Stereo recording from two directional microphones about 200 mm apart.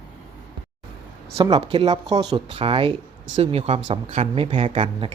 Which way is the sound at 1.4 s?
30° right (ahead or behind).